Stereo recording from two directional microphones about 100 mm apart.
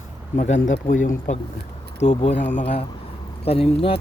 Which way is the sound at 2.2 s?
80° left.